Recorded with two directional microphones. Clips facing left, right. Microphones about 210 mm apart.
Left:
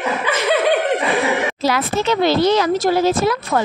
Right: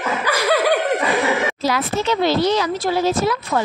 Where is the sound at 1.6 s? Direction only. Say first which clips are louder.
Left 3 dB; 65° left (ahead or behind); by 3.4 s 50° left (ahead or behind).